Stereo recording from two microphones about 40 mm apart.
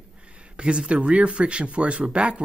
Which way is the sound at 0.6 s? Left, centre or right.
Right.